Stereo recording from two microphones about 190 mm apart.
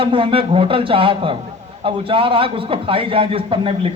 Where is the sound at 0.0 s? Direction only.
30° right (ahead or behind).